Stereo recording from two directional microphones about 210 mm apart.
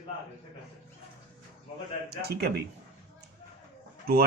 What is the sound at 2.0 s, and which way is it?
Speech, 50° right (ahead or behind).